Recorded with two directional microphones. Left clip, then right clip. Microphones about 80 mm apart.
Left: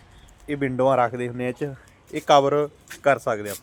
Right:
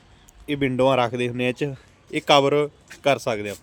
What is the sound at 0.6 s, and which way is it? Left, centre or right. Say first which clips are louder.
Speech: right 1 dB; right.